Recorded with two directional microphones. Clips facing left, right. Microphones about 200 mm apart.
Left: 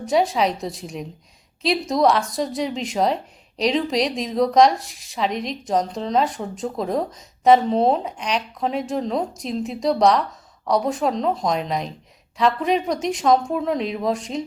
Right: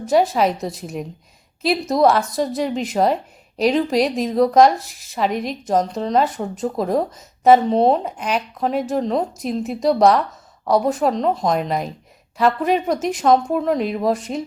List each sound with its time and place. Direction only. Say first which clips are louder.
0.0 s speech: right 3 dB; centre (ahead or behind)